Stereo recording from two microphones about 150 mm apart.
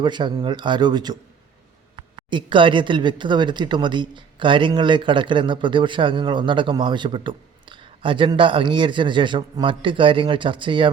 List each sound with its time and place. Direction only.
0.0 s speech: 30° right (ahead or behind)